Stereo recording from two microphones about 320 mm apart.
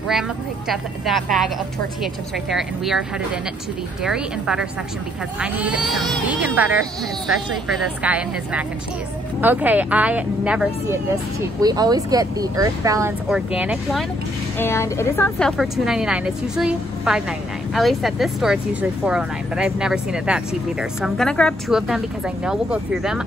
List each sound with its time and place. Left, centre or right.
0.7 s speech: centre
2.5 s speech: centre
14.6 s speech: centre